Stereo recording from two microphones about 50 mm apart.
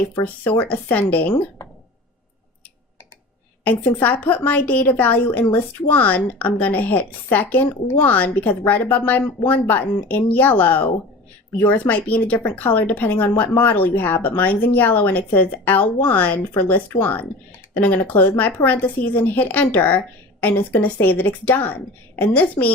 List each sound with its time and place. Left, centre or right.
0.7 s a woman's voice: left
1.6 s a sound: left
3.6 s a woman's voice: left